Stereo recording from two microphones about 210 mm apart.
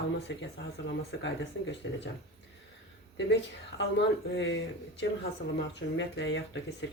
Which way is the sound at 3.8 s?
60° left (ahead or behind).